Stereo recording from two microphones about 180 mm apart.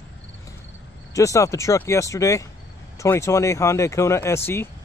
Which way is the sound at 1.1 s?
15° left (ahead or behind).